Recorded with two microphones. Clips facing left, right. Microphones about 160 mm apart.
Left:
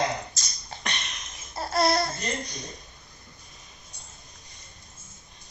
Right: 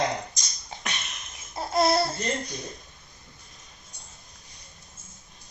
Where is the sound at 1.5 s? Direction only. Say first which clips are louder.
Right 1 dB; 20° right (ahead or behind).